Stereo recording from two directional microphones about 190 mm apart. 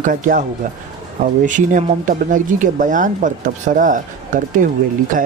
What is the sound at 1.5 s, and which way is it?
Speech, 40° right (ahead or behind).